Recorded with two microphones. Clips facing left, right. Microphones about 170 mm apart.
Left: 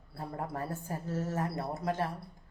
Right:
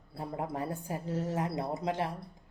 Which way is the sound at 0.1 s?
20° right (ahead or behind).